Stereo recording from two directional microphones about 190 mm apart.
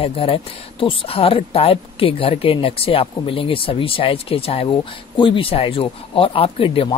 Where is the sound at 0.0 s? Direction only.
30° left (ahead or behind).